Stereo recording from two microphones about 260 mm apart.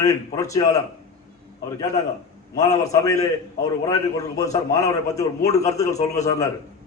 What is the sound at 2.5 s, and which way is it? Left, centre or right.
A man's voice, centre.